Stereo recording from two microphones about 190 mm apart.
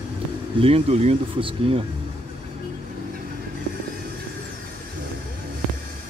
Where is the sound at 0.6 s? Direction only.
30° right (ahead or behind).